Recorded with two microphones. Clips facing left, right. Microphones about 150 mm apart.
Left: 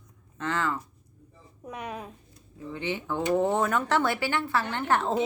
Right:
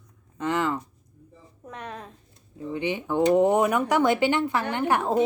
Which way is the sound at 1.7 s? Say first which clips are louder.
Left 1 dB; 10° left (ahead or behind).